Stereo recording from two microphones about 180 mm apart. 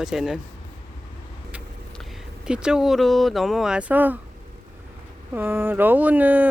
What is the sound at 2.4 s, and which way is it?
Speech, 5° right (ahead or behind).